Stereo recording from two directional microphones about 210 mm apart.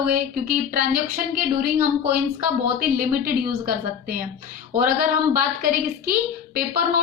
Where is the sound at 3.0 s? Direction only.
40° right (ahead or behind).